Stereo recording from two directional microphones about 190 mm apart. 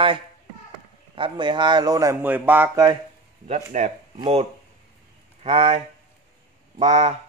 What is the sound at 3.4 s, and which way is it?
Speech, 40° right (ahead or behind).